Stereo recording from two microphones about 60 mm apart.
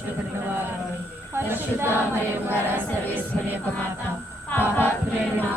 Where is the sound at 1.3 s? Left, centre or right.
Right.